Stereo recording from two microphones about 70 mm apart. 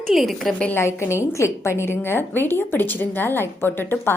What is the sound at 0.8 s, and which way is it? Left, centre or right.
A woman's voice, left.